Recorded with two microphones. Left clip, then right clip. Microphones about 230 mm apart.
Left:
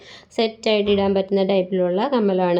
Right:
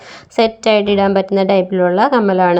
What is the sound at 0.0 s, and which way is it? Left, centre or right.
A woman's voice, centre.